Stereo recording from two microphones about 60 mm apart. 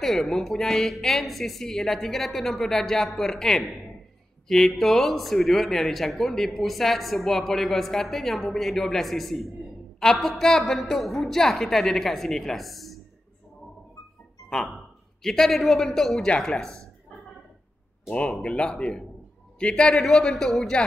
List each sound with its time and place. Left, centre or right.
0.0 s speech: centre
14.5 s a man's voice: centre
18.1 s a man's voice: centre